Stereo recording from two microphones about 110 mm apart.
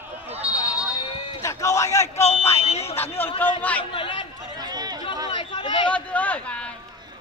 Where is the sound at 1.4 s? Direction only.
30° left (ahead or behind).